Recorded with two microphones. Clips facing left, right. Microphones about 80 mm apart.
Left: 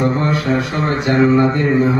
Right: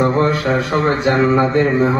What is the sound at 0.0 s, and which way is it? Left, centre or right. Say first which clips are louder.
Speech: right 2 dB; right.